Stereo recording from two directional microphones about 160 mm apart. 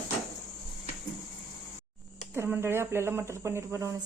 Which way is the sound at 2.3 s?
15° right (ahead or behind).